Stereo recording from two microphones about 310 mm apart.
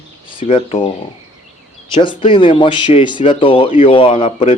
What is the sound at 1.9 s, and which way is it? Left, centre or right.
Speech, centre.